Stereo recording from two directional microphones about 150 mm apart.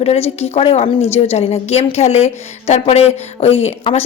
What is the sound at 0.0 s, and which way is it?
A woman's voice, 45° left (ahead or behind).